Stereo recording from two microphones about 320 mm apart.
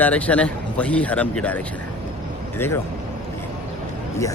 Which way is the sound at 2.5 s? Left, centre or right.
Centre.